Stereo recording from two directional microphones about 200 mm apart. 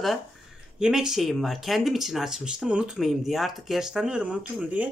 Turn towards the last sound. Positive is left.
turn(degrees=-5)  # may be behind; listen again after turning